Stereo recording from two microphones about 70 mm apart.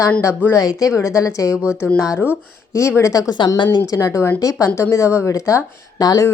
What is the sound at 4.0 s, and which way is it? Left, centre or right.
Speech, left.